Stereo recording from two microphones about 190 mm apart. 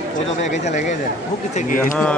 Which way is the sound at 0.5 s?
35° left (ahead or behind).